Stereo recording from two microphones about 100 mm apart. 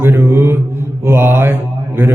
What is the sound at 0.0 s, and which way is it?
Mantra, 25° right (ahead or behind).